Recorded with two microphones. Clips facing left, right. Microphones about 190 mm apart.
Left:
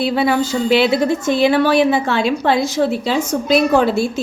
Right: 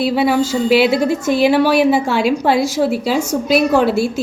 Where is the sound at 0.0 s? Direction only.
5° right (ahead or behind).